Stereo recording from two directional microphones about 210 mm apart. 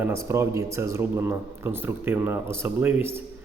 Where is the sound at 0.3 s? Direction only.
15° right (ahead or behind).